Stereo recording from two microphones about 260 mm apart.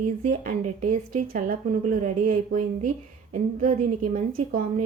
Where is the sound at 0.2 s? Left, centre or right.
Right.